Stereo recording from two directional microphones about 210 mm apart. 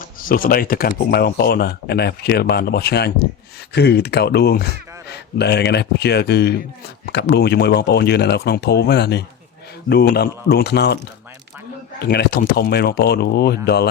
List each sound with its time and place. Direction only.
0.2 s speech: 40° left (ahead or behind)
12.0 s speech: 45° left (ahead or behind)